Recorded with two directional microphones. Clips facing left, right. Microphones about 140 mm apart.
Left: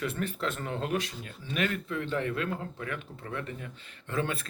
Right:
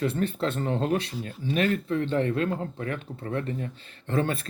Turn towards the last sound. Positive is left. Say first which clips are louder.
# right 5 dB
turn(degrees=-35)  # may be behind; listen again after turning